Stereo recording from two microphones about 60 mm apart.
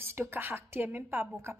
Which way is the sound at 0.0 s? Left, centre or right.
Right.